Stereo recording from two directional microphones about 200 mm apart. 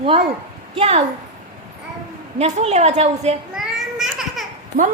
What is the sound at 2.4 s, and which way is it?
Speech, 35° right (ahead or behind).